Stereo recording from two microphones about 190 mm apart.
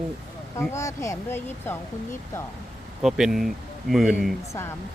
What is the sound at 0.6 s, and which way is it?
Speech, 15° left (ahead or behind).